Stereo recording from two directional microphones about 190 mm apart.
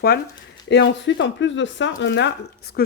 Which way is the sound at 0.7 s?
70° left (ahead or behind).